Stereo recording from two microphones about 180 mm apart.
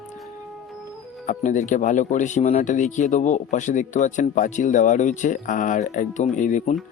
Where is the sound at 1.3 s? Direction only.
45° left (ahead or behind).